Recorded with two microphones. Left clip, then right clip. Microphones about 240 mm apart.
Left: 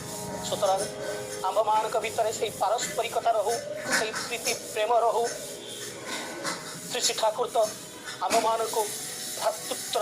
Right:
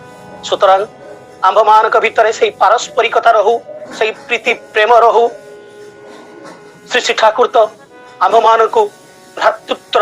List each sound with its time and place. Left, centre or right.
0.4 s speech: right
6.9 s speech: right